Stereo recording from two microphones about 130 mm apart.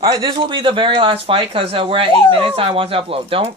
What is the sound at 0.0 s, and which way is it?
Speech, 30° right (ahead or behind).